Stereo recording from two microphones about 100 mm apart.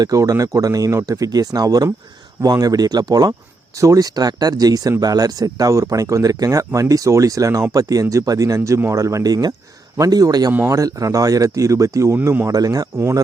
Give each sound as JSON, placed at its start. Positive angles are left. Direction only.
{"t": 0.0, "sound": "speech", "side_deg": -35}
{"t": 12.1, "sound": "speech", "side_deg": -20}
{"t": 12.5, "sound": "speech", "side_deg": -35}